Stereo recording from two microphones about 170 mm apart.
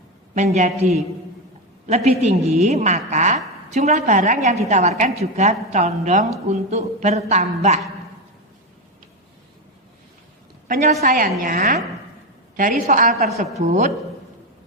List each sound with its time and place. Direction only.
0.3 s a woman's voice: 45° right (ahead or behind)
2.0 s a woman's voice: 40° right (ahead or behind)
11.0 s a woman's voice: 55° right (ahead or behind)
13.1 s a woman's voice: 60° right (ahead or behind)
13.6 s a woman's voice: 45° right (ahead or behind)